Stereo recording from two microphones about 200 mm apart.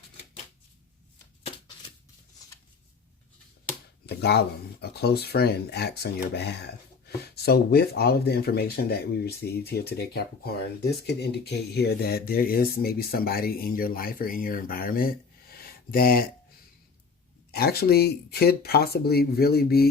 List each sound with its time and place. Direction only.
4.0 s speech: 55° left (ahead or behind)
17.5 s speech: 50° left (ahead or behind)